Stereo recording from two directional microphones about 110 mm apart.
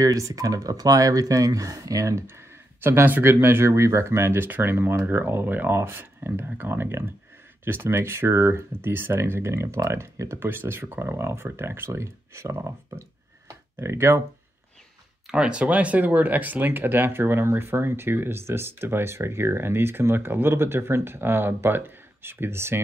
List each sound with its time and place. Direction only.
0.0 s speech: 30° right (ahead or behind)
13.5 s tick-tock: 25° right (ahead or behind)
15.2 s speech: 10° right (ahead or behind)